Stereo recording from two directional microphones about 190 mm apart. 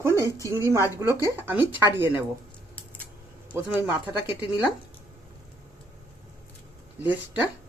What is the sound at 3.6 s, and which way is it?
Speech, 10° right (ahead or behind).